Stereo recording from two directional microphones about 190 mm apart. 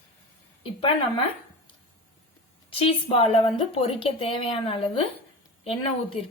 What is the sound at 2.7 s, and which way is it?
A woman's voice, 30° left (ahead or behind).